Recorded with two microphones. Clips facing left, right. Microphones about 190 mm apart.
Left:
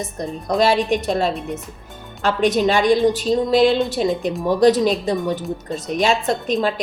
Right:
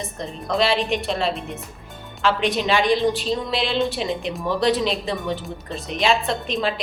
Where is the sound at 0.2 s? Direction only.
45° left (ahead or behind).